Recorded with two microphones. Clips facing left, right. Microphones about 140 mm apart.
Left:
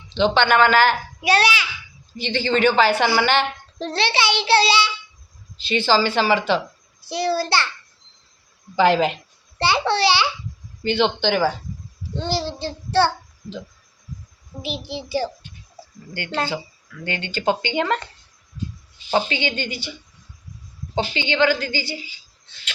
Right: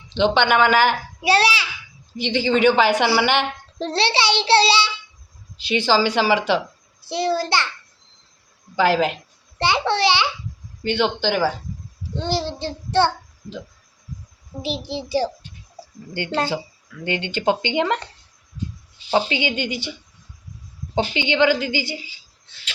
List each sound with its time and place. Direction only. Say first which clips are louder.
0.1 s a woman's voice: even; 15° right (ahead or behind)
1.2 s speech: right 1 dB; 30° right (ahead or behind)
2.1 s a woman's voice: right 2 dB; 15° right (ahead or behind)
3.8 s speech: right 1 dB; 30° right (ahead or behind)
5.6 s a woman's voice: even; 15° right (ahead or behind)
7.0 s speech: even; 25° right (ahead or behind)
8.7 s speech: left 1 dB; centre (ahead or behind)
9.6 s speech: even; 15° right (ahead or behind)
10.8 s speech: left 1 dB; 5° right (ahead or behind)
12.1 s speech: right 1 dB; 20° right (ahead or behind)
14.6 s a child's voice: right 3 dB; 35° right (ahead or behind); by 18.1 s 15° right (ahead or behind)
19.3 s a woman's voice: right 2 dB; 15° right (ahead or behind)
21.1 s a woman's voice: right 1 dB; 15° right (ahead or behind)